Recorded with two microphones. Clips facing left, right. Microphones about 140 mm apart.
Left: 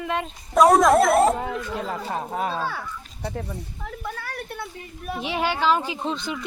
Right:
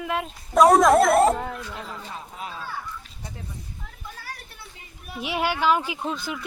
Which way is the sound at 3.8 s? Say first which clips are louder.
Left 9 dB; 70° left (ahead or behind).